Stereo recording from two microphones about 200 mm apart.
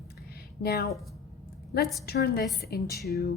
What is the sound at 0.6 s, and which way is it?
Speech, 50° left (ahead or behind).